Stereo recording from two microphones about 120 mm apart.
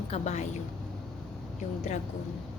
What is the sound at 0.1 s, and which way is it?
Speech, 70° left (ahead or behind).